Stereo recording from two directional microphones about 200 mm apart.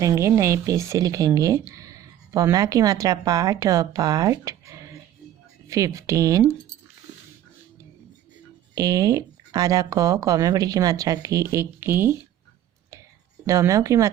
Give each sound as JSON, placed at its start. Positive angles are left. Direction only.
{"t": 0.0, "sound": "speech", "side_deg": -15}
{"t": 8.7, "sound": "speech", "side_deg": -20}
{"t": 13.5, "sound": "speech", "side_deg": -15}